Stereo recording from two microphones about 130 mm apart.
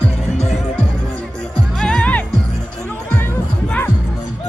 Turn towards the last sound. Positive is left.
turn(degrees=15)  # may be behind; listen again after turning